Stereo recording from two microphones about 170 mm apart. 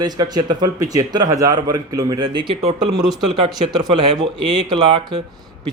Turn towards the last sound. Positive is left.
turn(degrees=-25)  # may be behind; listen again after turning